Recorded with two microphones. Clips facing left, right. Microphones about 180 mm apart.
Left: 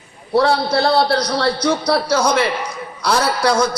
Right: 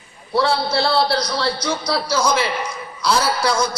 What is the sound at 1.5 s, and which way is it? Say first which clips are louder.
A man's voice: left 5 dB; 60° left (ahead or behind).